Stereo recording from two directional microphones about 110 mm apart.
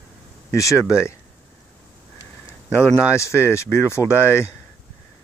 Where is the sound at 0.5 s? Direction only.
30° left (ahead or behind).